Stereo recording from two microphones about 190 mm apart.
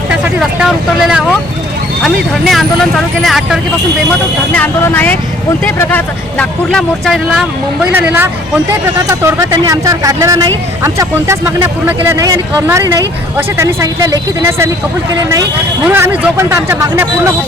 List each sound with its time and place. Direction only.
0.1 s speech: 5° right (ahead or behind)
7.9 s speech: 10° right (ahead or behind)
15.9 s speech: 10° right (ahead or behind)